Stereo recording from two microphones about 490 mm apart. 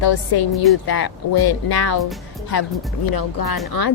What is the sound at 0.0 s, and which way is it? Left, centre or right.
Speech, left.